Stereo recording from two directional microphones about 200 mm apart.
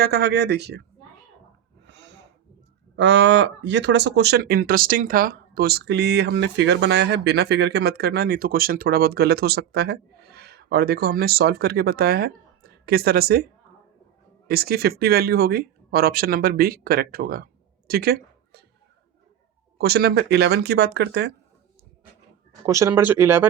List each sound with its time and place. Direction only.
0.0 s speech: 55° right (ahead or behind)
1.8 s snort: 60° right (ahead or behind)
2.9 s speech: 65° right (ahead or behind)
19.8 s speech: 50° right (ahead or behind)
22.6 s speech: 15° right (ahead or behind)